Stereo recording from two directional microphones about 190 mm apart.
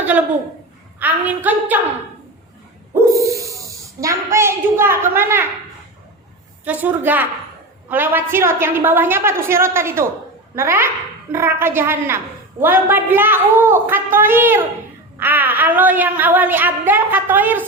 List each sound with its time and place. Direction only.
0.9 s a woman's voice: 10° right (ahead or behind)
3.1 s speech: 15° right (ahead or behind)
6.7 s a woman's voice: 10° right (ahead or behind)